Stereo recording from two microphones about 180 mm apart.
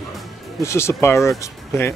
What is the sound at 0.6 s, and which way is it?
Speech, 15° left (ahead or behind).